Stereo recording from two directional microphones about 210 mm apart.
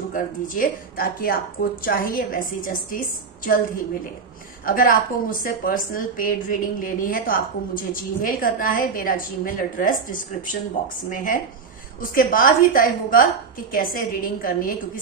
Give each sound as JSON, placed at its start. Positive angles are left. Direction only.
{"t": 0.1, "sound": "a woman's voice", "side_deg": 40}